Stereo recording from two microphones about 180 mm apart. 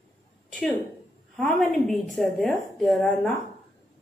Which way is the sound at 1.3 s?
5° left (ahead or behind).